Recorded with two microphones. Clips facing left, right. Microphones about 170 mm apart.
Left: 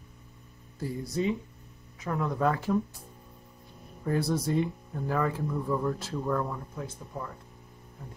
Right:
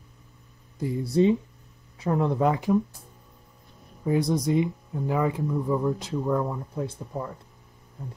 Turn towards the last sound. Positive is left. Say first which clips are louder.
# right 6 dB
turn(degrees=-30)  # may be behind; listen again after turning